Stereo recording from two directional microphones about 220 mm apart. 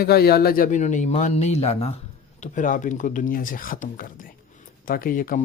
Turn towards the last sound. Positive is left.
turn(degrees=40)  # may be behind; listen again after turning